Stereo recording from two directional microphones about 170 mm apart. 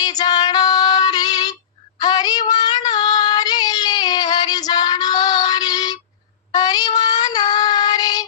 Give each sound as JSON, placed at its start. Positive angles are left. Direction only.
{"t": 0.0, "sound": "female singing", "side_deg": 25}
{"t": 2.0, "sound": "child singing", "side_deg": 25}
{"t": 2.5, "sound": "a sound", "side_deg": 25}
{"t": 6.5, "sound": "child singing", "side_deg": 25}